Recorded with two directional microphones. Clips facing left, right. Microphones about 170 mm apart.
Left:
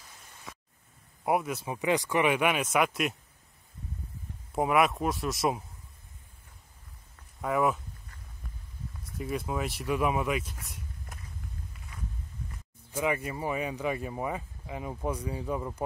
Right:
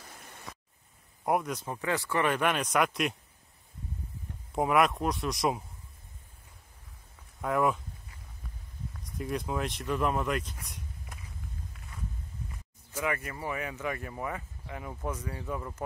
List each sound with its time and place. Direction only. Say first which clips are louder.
1.2 s speech: left 1 dB; 5° left (ahead or behind)
4.6 s speech: even; centre (ahead or behind)
7.4 s speech: even; centre (ahead or behind)
9.0 s speech: even; centre (ahead or behind)
12.9 s speech: left 3 dB; 25° left (ahead or behind)